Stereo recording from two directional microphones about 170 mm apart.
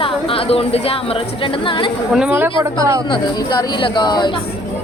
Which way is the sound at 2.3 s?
15° right (ahead or behind).